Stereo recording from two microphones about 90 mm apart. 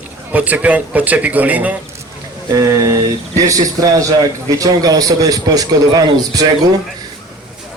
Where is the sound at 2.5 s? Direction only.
40° right (ahead or behind).